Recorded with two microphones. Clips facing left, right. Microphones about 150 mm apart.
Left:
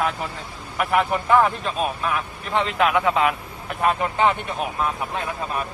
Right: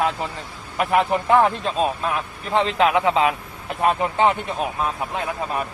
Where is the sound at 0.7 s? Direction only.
20° right (ahead or behind).